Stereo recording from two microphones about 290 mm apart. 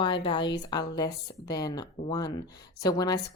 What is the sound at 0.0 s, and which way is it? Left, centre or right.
Speech, centre.